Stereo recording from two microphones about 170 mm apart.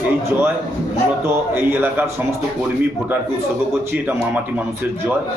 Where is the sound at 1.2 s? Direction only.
10° right (ahead or behind).